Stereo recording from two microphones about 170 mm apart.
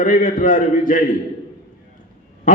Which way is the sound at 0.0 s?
50° left (ahead or behind).